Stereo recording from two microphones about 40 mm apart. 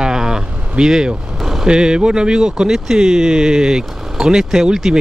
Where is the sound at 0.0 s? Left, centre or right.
Centre.